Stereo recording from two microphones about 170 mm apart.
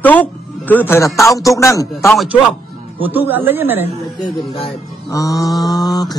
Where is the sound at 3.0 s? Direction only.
10° right (ahead or behind).